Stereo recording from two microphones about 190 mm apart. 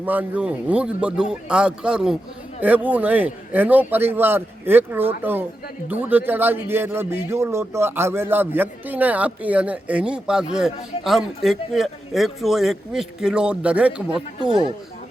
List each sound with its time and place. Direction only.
0.0 s a man's voice: 10° right (ahead or behind)